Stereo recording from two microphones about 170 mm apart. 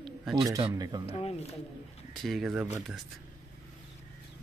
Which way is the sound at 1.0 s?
35° left (ahead or behind).